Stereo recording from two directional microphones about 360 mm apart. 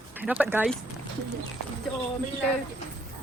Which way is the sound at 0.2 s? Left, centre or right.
Centre.